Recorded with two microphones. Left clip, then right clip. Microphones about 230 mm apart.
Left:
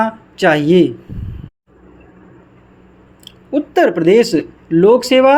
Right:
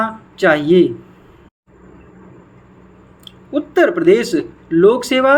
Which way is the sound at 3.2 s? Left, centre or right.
Left.